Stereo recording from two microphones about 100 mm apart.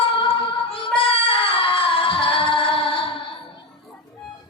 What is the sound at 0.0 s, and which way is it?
Singing, 65° left (ahead or behind).